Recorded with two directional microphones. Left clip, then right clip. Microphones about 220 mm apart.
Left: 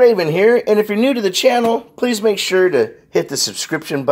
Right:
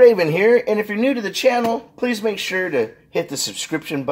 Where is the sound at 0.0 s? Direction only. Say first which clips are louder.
Left 1 dB; 15° left (ahead or behind).